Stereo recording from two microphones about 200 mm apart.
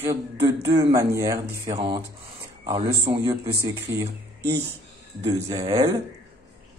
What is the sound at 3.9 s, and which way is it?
Speech, 15° right (ahead or behind).